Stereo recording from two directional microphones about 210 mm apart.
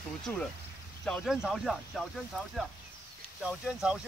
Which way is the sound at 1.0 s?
Centre (ahead or behind).